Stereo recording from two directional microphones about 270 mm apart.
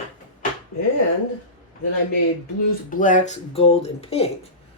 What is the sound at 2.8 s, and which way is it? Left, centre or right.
Speech, left.